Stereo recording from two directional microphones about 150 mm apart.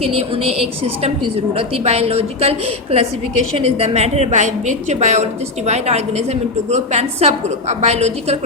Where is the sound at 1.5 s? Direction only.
40° right (ahead or behind).